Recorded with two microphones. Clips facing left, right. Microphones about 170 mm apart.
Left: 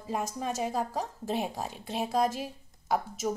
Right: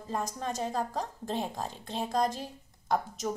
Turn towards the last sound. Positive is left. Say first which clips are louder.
# left 1 dB
turn(degrees=5)  # may be behind; listen again after turning